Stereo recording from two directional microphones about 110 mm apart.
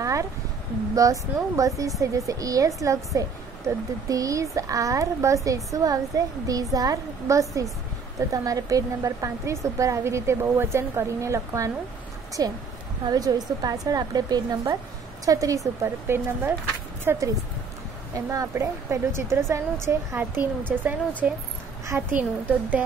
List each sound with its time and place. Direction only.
0.0 s a sound: 30° right (ahead or behind)
0.9 s a woman's voice: 30° right (ahead or behind)
20.7 s a woman's voice: 10° right (ahead or behind)